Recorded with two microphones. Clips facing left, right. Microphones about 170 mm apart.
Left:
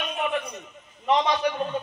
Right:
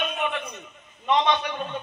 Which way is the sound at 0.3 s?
35° left (ahead or behind).